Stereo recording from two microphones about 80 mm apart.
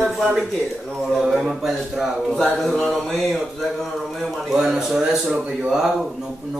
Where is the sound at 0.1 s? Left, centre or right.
Centre.